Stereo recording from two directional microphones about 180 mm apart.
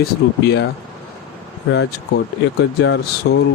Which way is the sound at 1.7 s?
75° left (ahead or behind).